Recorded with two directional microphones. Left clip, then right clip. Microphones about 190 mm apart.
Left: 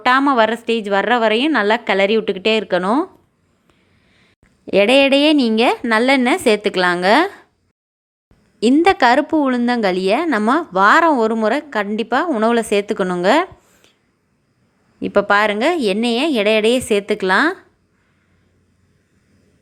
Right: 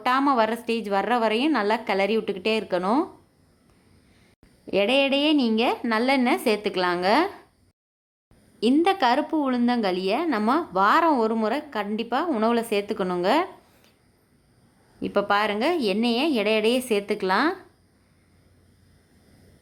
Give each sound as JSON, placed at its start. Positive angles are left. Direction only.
{"t": 0.0, "sound": "a woman's voice", "side_deg": 20}
{"t": 4.1, "sound": "a woman's voice", "side_deg": 20}
{"t": 8.5, "sound": "a woman's voice", "side_deg": 25}
{"t": 14.9, "sound": "a woman's voice", "side_deg": 20}